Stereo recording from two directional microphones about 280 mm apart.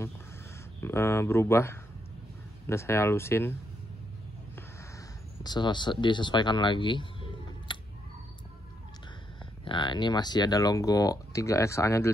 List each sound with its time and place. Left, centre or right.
0.8 s speech: centre
5.4 s speech: centre
9.7 s speech: centre